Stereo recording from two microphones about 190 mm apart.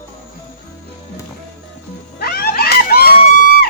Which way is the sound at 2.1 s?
55° left (ahead or behind).